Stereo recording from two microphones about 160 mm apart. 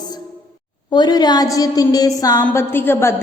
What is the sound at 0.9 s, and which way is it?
A woman's voice, 25° left (ahead or behind).